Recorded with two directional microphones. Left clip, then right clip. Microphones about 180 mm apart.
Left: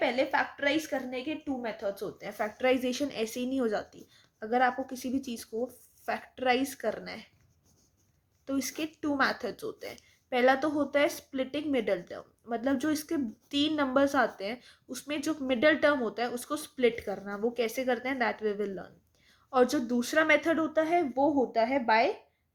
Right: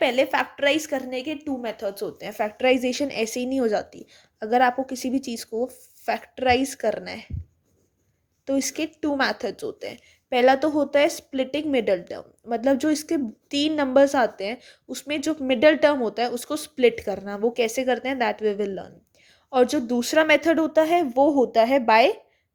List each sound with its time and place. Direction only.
0.0 s speech: 50° right (ahead or behind)
8.4 s speech: 30° right (ahead or behind); by 22.1 s 50° right (ahead or behind)